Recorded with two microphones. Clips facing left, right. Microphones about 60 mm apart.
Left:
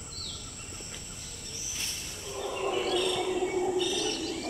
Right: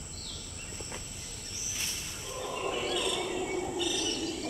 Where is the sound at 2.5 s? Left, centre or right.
Centre.